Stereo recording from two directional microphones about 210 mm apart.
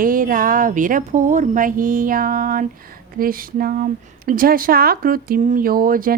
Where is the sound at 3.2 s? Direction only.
45° right (ahead or behind).